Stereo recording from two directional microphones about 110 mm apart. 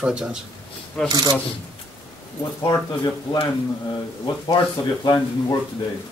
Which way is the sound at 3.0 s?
40° left (ahead or behind).